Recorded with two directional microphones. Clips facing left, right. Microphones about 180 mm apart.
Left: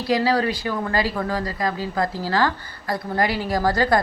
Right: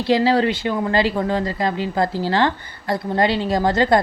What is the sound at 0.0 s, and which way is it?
Speech, 25° right (ahead or behind).